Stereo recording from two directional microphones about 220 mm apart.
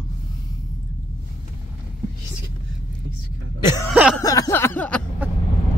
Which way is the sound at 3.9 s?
5° right (ahead or behind).